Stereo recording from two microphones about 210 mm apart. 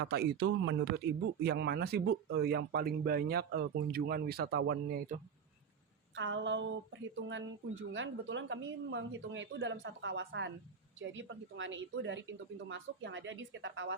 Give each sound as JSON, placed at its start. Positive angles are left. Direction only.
{"t": 0.0, "sound": "a woman's voice", "side_deg": -50}
{"t": 6.1, "sound": "a woman's voice", "side_deg": -60}